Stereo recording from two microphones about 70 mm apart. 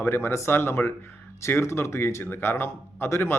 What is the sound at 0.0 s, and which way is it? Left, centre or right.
Speech, left.